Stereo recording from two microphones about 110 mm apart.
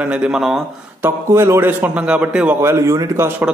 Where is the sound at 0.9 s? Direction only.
20° right (ahead or behind).